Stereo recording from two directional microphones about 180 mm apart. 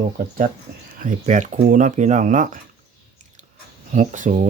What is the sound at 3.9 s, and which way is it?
Speech, 45° right (ahead or behind).